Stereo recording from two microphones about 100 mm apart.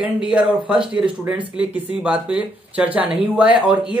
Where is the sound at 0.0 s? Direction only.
10° right (ahead or behind).